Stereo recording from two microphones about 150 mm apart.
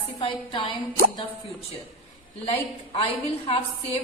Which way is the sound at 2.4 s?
40° left (ahead or behind).